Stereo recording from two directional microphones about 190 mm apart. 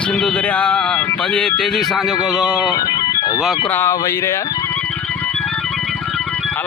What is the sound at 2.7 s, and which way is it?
Organ, 20° left (ahead or behind).